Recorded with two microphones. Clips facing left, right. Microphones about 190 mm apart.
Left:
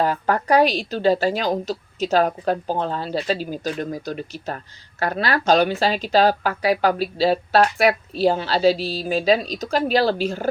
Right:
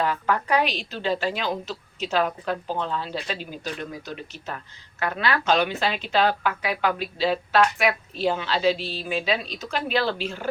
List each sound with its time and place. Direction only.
0.0 s a woman's voice: 40° left (ahead or behind)